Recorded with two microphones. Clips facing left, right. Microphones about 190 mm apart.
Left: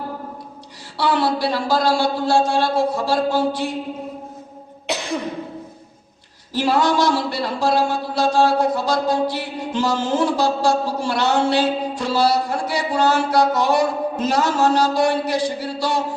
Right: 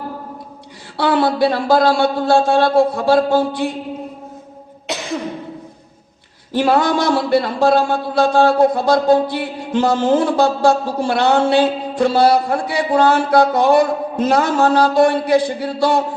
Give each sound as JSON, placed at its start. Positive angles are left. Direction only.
{"t": 0.9, "sound": "a man's voice", "side_deg": -55}
{"t": 6.5, "sound": "a man's voice", "side_deg": -55}